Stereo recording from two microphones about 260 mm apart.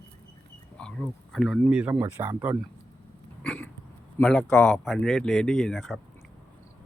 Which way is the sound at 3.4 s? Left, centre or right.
Centre.